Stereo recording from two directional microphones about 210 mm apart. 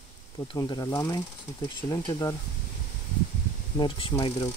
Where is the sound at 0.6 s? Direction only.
20° left (ahead or behind).